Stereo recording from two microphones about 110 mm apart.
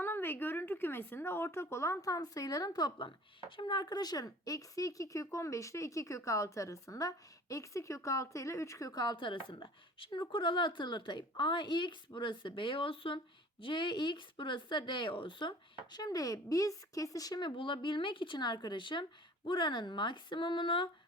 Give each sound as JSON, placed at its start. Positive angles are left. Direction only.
{"t": 0.0, "sound": "speech", "side_deg": 20}
{"t": 17.6, "sound": "speech", "side_deg": 50}